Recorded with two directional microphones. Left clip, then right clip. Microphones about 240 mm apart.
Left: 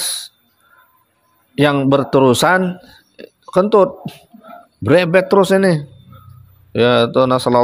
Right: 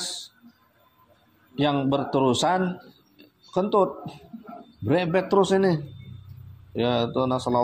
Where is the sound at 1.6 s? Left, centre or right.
Left.